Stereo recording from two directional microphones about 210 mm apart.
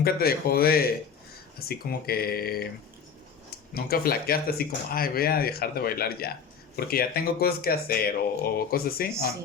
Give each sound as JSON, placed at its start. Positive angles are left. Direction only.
{"t": 0.0, "sound": "speech", "side_deg": 45}
{"t": 3.8, "sound": "speech", "side_deg": 45}